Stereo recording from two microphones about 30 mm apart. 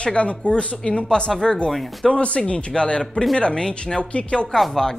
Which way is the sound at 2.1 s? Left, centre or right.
Left.